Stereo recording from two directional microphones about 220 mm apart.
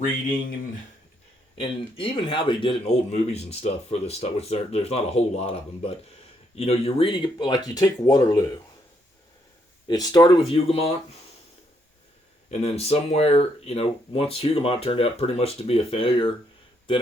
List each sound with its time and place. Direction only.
1.5 s a man's voice: 25° left (ahead or behind)
9.8 s a man's voice: 15° left (ahead or behind)
12.5 s a man's voice: 30° left (ahead or behind)